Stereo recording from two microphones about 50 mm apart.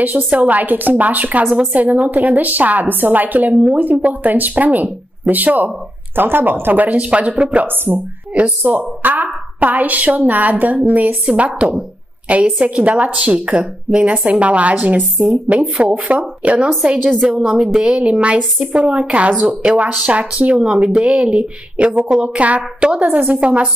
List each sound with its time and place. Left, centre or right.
0.0 s a woman's voice: right
7.6 s a woman's voice: right
20.5 s speech: centre